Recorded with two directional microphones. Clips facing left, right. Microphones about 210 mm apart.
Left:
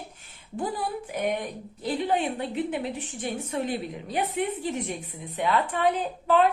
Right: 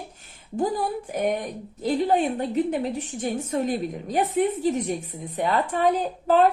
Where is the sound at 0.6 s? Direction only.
40° right (ahead or behind).